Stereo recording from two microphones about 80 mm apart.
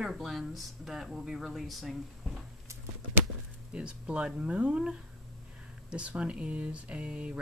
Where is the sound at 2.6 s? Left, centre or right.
Right.